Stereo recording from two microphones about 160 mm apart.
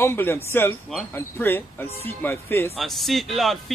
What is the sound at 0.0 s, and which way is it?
Speech, 15° left (ahead or behind).